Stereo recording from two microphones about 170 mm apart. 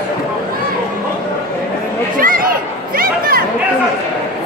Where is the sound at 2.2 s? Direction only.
55° right (ahead or behind).